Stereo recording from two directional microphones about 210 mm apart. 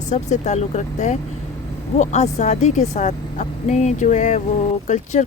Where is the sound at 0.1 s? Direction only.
35° left (ahead or behind).